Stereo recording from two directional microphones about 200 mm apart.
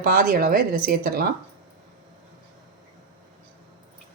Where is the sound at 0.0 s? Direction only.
45° right (ahead or behind).